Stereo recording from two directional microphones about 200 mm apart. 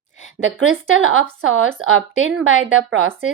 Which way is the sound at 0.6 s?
80° right.